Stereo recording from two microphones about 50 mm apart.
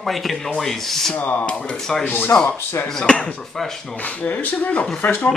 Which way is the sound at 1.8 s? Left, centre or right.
Centre.